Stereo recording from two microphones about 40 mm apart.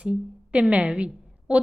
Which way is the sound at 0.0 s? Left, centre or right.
Right.